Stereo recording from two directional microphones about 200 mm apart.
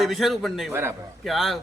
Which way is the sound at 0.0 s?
Centre (ahead or behind).